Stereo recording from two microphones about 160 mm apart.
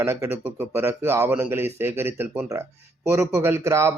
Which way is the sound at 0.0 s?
15° right (ahead or behind).